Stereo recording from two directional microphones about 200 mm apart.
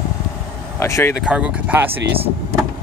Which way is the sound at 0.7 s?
15° left (ahead or behind).